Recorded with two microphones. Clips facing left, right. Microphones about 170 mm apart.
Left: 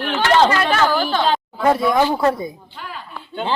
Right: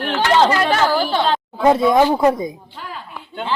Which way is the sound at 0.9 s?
30° right (ahead or behind).